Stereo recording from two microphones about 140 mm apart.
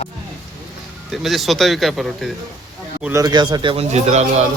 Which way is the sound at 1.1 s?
Centre (ahead or behind).